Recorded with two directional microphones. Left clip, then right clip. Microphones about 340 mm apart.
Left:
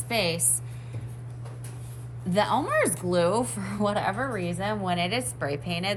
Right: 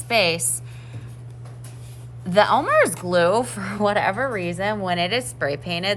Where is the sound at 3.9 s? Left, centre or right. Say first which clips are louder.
Right 6 dB; centre.